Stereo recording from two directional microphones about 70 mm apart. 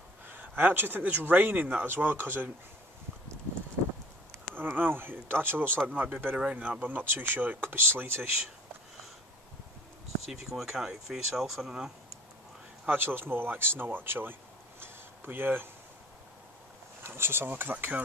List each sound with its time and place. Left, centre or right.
0.3 s speech: right
4.3 s speech: right
5.9 s speech: centre
10.3 s speech: centre
12.8 s speech: right
14.8 s a sound: right
17.0 s speech: right